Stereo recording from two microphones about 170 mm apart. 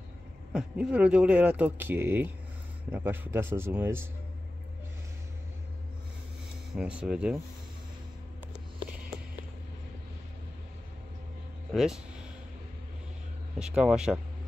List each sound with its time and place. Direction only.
0.5 s speech: 5° right (ahead or behind)
6.7 s speech: 5° right (ahead or behind)
11.7 s speech: centre (ahead or behind)
13.6 s speech: 5° right (ahead or behind)